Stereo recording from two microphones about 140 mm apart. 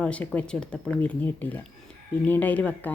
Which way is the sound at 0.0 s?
10° left (ahead or behind).